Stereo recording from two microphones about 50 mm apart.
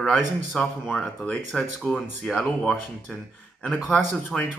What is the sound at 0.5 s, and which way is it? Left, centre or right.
Speech, centre.